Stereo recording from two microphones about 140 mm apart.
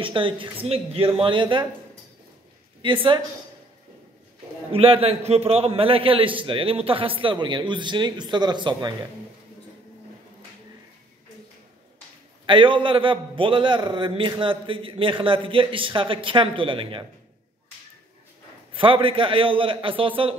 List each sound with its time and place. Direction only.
0.0 s a man's voice: 35° right (ahead or behind)
2.8 s a man's voice: 35° right (ahead or behind)
4.7 s a man's voice: 40° right (ahead or behind)
12.4 s a man's voice: 35° right (ahead or behind)
18.7 s a man's voice: 40° right (ahead or behind)